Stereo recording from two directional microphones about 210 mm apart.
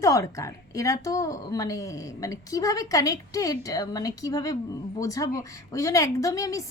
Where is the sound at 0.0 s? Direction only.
15° left (ahead or behind).